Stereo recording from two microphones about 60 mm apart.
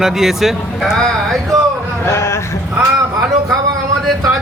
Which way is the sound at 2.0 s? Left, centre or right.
Left.